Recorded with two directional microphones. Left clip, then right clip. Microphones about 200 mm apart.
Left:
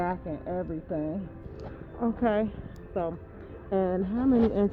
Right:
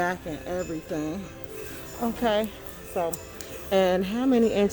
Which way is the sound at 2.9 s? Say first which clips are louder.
Right 3 dB; 5° left (ahead or behind).